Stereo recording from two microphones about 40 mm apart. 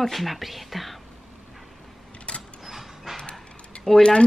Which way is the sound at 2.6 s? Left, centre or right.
Centre.